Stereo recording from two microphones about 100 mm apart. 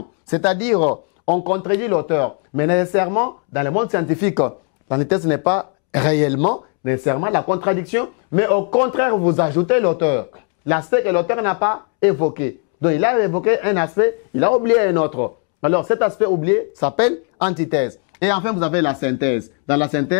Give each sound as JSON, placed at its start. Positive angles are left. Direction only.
{"t": 0.7, "sound": "speech", "side_deg": 15}